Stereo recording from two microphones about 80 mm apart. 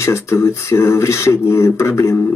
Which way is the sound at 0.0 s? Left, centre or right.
Left.